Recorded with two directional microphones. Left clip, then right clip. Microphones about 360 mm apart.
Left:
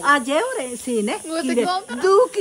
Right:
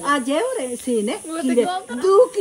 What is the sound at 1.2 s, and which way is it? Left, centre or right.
Speech, centre.